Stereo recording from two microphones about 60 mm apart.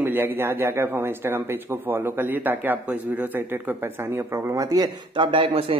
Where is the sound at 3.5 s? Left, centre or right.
Right.